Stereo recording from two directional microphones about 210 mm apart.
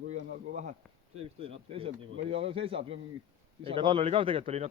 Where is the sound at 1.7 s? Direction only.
25° right (ahead or behind).